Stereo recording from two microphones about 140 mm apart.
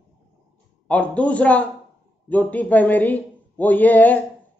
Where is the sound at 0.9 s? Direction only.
10° left (ahead or behind).